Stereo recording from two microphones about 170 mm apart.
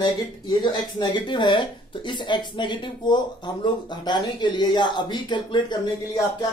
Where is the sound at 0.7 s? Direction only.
25° left (ahead or behind).